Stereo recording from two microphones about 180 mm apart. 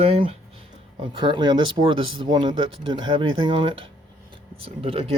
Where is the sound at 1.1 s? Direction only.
25° right (ahead or behind).